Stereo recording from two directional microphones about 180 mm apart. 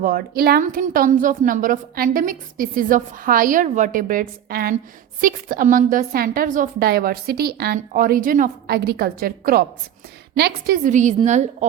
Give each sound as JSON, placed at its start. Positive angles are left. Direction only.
{"t": 0.0, "sound": "a woman's voice", "side_deg": -55}
{"t": 10.8, "sound": "a woman's voice", "side_deg": -45}